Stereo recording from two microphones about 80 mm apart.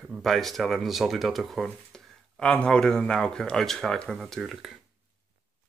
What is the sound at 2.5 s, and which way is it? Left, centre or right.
Speech, centre.